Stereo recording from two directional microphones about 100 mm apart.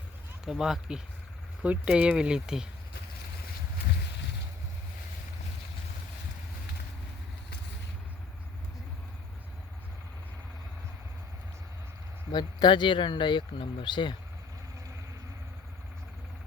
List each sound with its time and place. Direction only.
0.4 s speech: 5° right (ahead or behind)
12.3 s speech: 45° left (ahead or behind)